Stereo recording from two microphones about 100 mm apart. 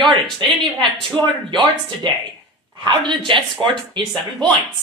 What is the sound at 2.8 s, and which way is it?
Speech, 50° right (ahead or behind).